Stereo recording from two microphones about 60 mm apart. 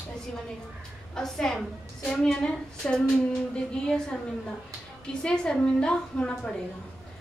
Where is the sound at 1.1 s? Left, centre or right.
Centre.